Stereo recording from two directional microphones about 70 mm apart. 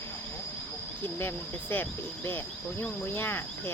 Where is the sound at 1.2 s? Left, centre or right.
Left.